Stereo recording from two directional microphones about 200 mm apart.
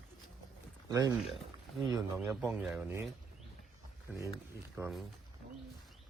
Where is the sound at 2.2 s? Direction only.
10° right (ahead or behind).